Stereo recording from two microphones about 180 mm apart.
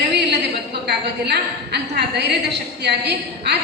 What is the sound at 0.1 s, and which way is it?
A woman's voice, 65° right (ahead or behind).